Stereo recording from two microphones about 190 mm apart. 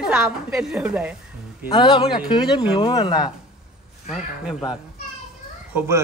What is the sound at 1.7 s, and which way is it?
Speech, 25° left (ahead or behind).